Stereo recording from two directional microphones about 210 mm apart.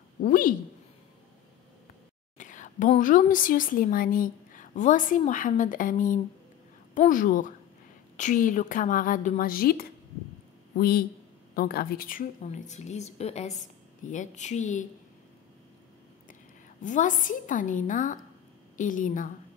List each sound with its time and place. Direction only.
0.2 s a woman's voice: 40° left (ahead or behind)
2.3 s a woman's voice: 35° left (ahead or behind)
16.8 s a woman's voice: 40° left (ahead or behind)